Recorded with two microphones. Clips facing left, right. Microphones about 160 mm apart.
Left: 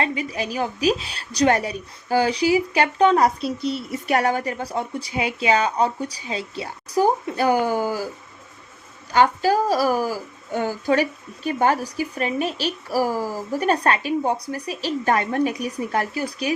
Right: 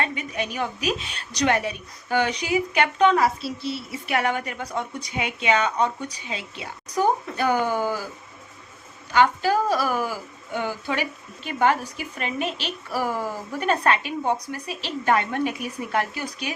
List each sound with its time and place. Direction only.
0.0 s a woman's voice: 30° left (ahead or behind)
7.5 s speech: 15° left (ahead or behind)
9.1 s a woman's voice: 40° left (ahead or behind)